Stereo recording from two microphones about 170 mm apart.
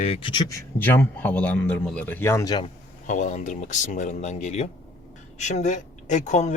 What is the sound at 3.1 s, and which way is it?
Speech, 45° left (ahead or behind).